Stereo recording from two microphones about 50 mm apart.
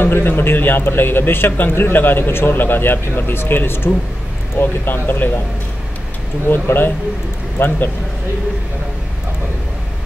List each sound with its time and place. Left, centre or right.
0.0 s a man's voice: left
6.5 s a man's voice: left